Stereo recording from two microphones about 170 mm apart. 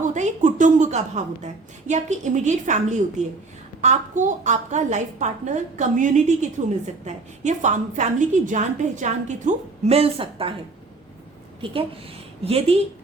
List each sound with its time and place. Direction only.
0.0 s a woman's voice: 45° right (ahead or behind)
11.6 s a woman's voice: 30° right (ahead or behind)